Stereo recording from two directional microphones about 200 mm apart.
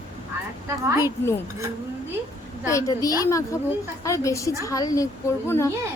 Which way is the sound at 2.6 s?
15° left (ahead or behind).